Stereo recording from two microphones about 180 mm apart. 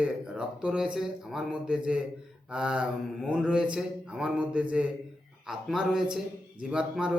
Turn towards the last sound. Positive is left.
turn(degrees=-5)  # may be behind; listen again after turning